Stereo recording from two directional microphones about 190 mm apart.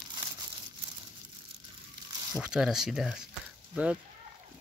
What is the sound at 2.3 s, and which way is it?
Speech, 5° right (ahead or behind).